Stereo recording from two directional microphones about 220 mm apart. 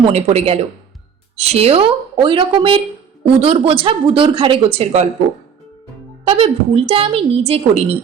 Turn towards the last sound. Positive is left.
turn(degrees=-25)  # may be behind; listen again after turning